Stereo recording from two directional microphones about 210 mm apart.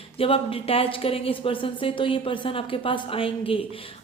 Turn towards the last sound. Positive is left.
turn(degrees=25)  # may be behind; listen again after turning